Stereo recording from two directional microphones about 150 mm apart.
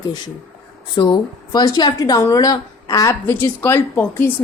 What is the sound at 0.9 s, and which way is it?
Speech, 30° left (ahead or behind).